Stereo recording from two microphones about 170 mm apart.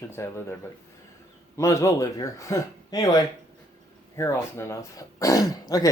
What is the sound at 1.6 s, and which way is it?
Speech, 20° left (ahead or behind).